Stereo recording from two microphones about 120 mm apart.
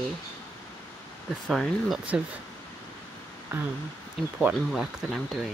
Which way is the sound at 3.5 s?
20° right (ahead or behind).